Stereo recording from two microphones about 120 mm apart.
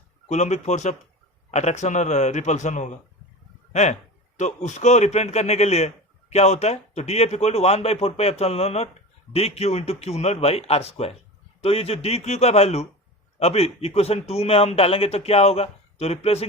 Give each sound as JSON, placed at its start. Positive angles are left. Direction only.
{"t": 0.3, "sound": "a man's voice", "side_deg": 70}